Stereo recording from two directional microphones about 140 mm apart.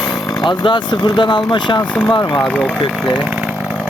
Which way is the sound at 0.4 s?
35° left (ahead or behind).